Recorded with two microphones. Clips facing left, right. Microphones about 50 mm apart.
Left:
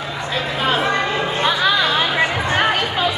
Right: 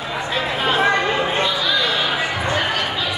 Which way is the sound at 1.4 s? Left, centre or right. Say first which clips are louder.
Left 3 dB; left.